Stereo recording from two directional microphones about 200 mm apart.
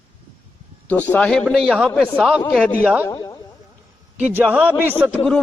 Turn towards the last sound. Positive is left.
turn(degrees=5)  # may be behind; listen again after turning